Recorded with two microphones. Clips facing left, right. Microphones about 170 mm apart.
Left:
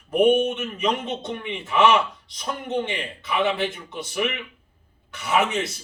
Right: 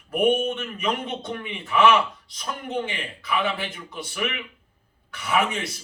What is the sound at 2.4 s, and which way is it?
A man's voice, 20° left (ahead or behind).